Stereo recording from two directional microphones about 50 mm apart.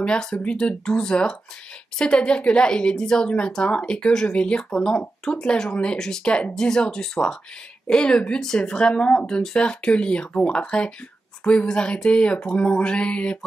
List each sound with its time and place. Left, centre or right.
0.0 s a woman's voice: centre